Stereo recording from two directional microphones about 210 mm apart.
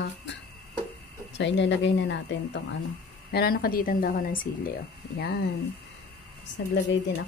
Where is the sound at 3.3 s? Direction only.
45° left (ahead or behind).